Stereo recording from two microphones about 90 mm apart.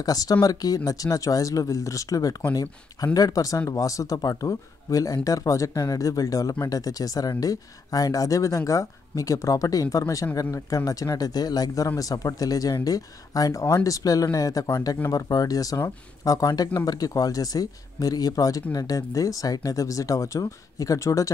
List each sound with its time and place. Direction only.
0.0 s speech: 45° left (ahead or behind)